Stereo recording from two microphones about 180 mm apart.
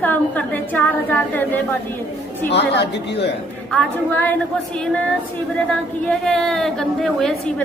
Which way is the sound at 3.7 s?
10° left (ahead or behind).